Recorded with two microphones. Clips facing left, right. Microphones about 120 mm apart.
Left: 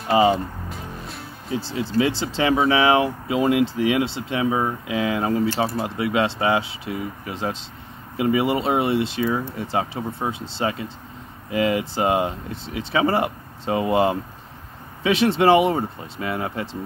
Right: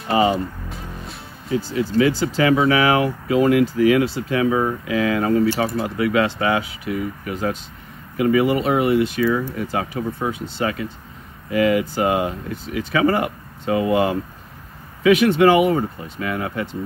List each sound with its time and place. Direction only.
0.1 s speech: 25° left (ahead or behind)
0.7 s music: centre (ahead or behind)
1.5 s speech: 30° left (ahead or behind)